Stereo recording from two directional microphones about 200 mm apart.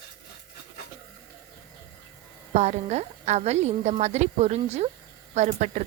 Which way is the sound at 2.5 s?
35° right (ahead or behind).